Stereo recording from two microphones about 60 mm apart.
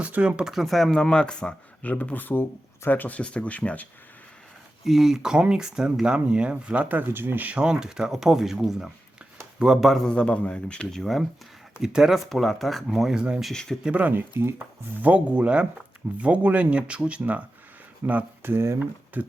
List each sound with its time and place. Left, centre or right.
0.0 s speech: right
0.4 s speech: centre
0.9 s speech: centre
4.9 s speech: centre
6.8 s speech: right
7.5 s speech: centre
10.1 s speech: centre
11.0 s speech: centre
11.8 s speech: centre
13.5 s speech: centre
13.8 s speech: right
18.5 s speech: right
18.8 s speech: right